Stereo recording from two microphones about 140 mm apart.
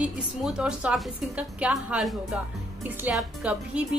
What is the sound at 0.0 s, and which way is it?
A woman's voice, 5° right (ahead or behind).